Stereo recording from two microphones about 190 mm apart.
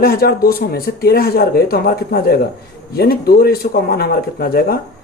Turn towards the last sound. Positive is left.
turn(degrees=55)  # may be behind; listen again after turning